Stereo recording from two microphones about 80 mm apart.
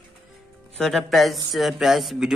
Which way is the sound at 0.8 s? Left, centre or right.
Centre.